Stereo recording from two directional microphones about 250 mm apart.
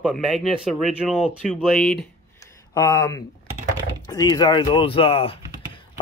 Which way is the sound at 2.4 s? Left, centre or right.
Centre.